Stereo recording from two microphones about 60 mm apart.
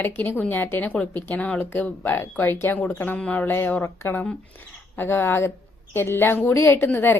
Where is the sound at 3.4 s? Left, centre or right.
Left.